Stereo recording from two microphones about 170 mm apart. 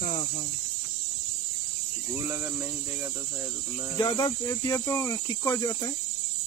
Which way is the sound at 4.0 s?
20° left (ahead or behind).